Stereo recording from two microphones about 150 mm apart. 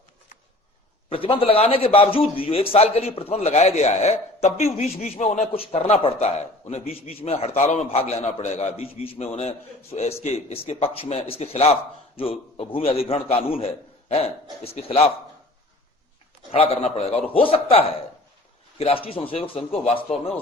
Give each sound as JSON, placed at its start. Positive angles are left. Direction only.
{"t": 1.1, "sound": "a man's voice", "side_deg": 35}
{"t": 16.5, "sound": "a man's voice", "side_deg": 40}